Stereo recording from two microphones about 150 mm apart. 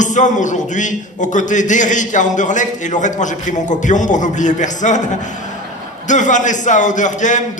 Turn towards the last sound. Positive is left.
turn(degrees=55)  # may be behind; listen again after turning